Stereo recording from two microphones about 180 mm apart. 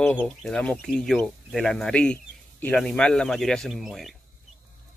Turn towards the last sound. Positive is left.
turn(degrees=0)  # may be behind; listen again after turning